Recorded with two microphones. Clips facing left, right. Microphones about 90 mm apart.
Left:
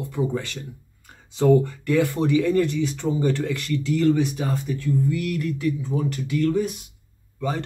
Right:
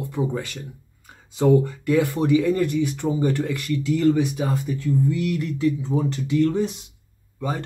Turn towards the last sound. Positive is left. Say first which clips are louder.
# left 1 dB
turn(degrees=-15)  # may be behind; listen again after turning